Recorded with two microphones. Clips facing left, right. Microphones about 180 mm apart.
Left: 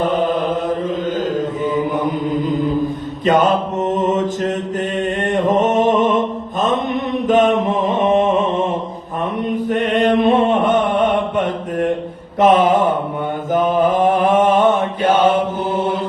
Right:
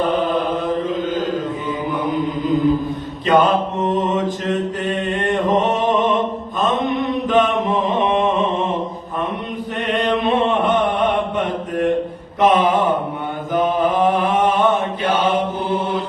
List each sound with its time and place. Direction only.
0.0 s mantra: 45° left (ahead or behind)
3.2 s mantra: 45° left (ahead or behind)
5.7 s music: 50° left (ahead or behind)
6.6 s mantra: 45° left (ahead or behind)
9.7 s mantra: 45° left (ahead or behind)